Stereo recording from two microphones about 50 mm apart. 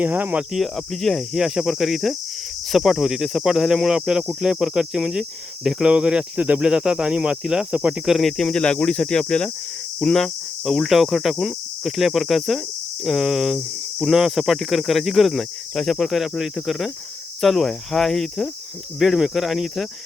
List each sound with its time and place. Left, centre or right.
0.0 s speech: right
0.5 s cricket: centre
1.3 s speech: centre; by 6.7 s right
6.7 s speech: centre
7.7 s speech: right
8.0 s speech: centre
10.0 s cricket: centre